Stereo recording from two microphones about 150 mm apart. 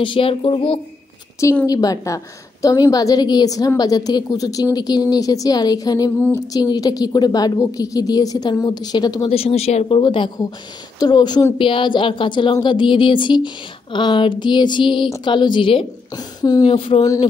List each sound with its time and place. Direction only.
0.0 s speech: 35° left (ahead or behind)
1.7 s a woman's voice: 25° left (ahead or behind)
9.3 s speech: 40° left (ahead or behind); by 16.6 s 25° left (ahead or behind)
16.6 s speech: 35° left (ahead or behind)